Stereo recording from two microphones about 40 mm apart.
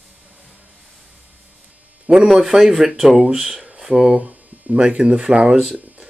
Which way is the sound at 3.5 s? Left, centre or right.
Right.